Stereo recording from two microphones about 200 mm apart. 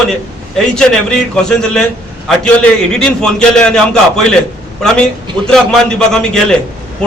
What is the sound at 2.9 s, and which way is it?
A man's voice, 5° left (ahead or behind).